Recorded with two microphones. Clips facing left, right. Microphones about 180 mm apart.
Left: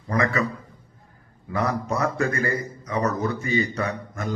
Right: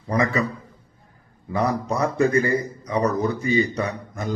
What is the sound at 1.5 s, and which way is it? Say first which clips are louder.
A man's voice: right 2 dB; 15° right (ahead or behind).